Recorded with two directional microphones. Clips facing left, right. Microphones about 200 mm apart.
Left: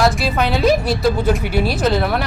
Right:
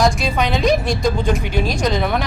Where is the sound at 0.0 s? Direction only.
5° left (ahead or behind).